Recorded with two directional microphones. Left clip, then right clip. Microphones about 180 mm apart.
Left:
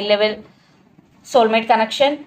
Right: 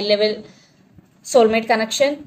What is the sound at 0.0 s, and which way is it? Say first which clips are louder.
Speech: left 1 dB; 55° right (ahead or behind).